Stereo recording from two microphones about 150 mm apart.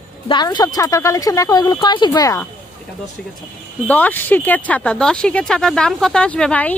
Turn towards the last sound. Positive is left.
turn(degrees=10)  # may be behind; listen again after turning